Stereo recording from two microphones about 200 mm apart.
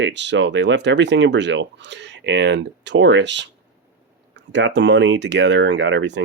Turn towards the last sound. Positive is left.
turn(degrees=-65)  # may be behind; listen again after turning